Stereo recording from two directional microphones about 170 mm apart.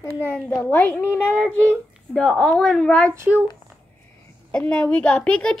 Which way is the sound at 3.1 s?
15° right (ahead or behind).